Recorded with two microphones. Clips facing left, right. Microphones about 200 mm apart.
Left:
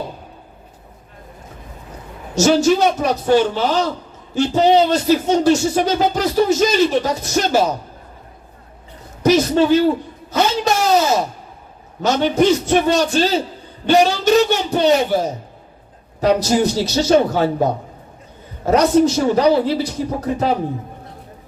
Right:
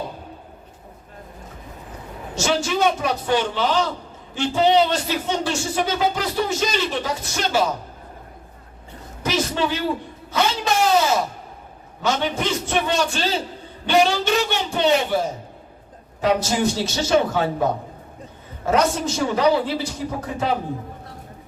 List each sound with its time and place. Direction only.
2.3 s speech: 40° left (ahead or behind)
9.2 s speech: 40° left (ahead or behind)
12.0 s speech: 40° left (ahead or behind)